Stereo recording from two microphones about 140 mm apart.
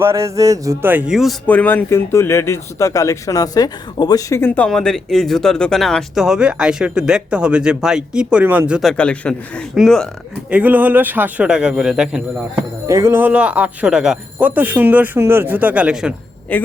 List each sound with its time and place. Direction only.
0.0 s music: 20° right (ahead or behind); by 1.4 s centre (ahead or behind)
1.5 s speech: 10° left (ahead or behind); by 8.9 s 10° right (ahead or behind)
8.9 s a man's voice: 10° left (ahead or behind)
10.5 s speech: 10° right (ahead or behind)
12.9 s speech: 20° right (ahead or behind)
16.5 s a man's voice: 10° left (ahead or behind)